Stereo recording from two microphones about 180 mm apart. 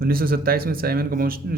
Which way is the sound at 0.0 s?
55° right (ahead or behind).